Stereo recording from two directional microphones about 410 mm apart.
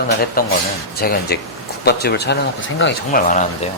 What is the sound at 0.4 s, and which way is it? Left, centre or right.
Speech, left.